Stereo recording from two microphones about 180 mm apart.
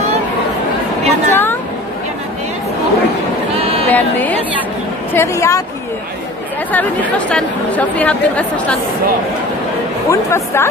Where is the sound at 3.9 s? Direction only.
10° left (ahead or behind).